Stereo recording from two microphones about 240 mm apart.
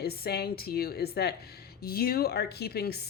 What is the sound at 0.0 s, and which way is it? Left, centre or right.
A woman's voice, left.